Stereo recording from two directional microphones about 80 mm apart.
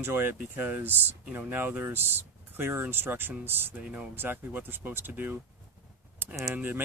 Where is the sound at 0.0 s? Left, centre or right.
Right.